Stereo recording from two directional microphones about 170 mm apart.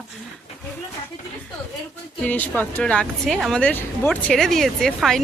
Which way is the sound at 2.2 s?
10° left (ahead or behind).